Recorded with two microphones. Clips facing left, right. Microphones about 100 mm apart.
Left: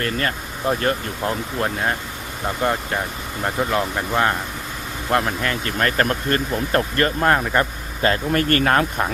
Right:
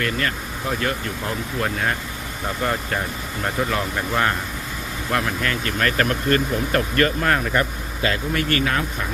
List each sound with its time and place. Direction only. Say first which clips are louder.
0.0 s speech: left 1 dB; 35° left (ahead or behind)
1.6 s speech: left 1 dB; 25° left (ahead or behind); by 8.8 s 45° left (ahead or behind)